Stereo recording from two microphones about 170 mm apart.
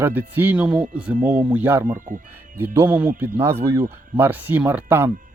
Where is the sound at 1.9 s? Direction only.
50° right (ahead or behind).